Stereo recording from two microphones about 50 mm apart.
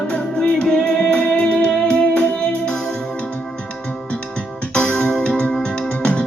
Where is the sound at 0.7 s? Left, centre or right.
Left.